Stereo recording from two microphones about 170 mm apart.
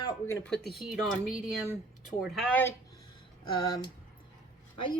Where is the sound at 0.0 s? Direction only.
20° left (ahead or behind).